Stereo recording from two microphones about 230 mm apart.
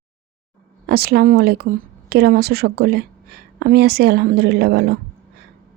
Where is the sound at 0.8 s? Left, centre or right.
Right.